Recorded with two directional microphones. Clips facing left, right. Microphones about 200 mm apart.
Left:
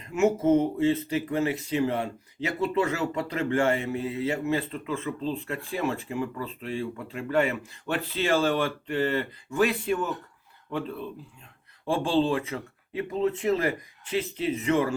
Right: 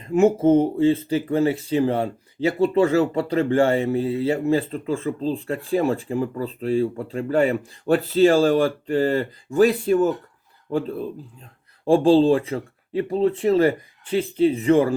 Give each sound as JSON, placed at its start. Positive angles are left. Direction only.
{"t": 0.0, "sound": "speech", "side_deg": -30}